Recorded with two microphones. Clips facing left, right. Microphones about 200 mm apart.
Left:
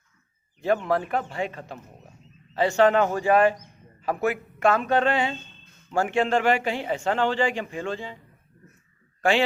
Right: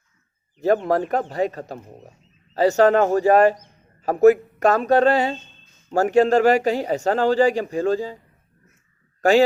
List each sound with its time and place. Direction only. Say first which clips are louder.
0.6 s a man's voice: right 5 dB; 40° right (ahead or behind)
9.2 s a man's voice: right 6 dB; 40° right (ahead or behind)